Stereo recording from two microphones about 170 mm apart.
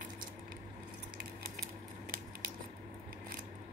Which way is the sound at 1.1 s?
65° right (ahead or behind).